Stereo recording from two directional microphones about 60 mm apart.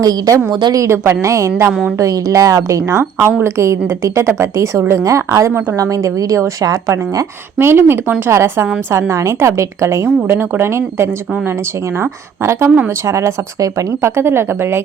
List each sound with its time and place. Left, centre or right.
0.0 s a woman's voice: right
0.9 s a woman's voice: right
2.0 s speech: right
3.0 s a woman's voice: right
5.7 s a woman's voice: right
7.6 s a woman's voice: right
12.6 s speech: right
13.1 s speech: right
14.0 s a woman's voice: right